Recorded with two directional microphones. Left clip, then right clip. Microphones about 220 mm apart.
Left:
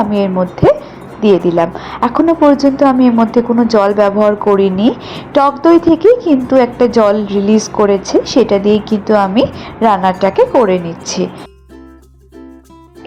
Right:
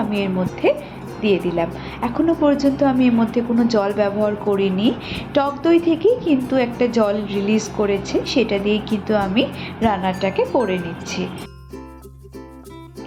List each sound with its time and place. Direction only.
0.1 s a woman's voice: 25° left (ahead or behind)